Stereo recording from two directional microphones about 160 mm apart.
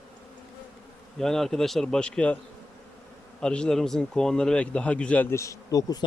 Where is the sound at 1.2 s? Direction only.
5° left (ahead or behind).